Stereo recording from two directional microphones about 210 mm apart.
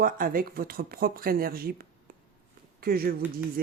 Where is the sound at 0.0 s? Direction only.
40° right (ahead or behind).